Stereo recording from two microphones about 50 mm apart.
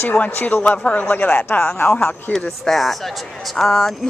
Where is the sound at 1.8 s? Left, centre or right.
Left.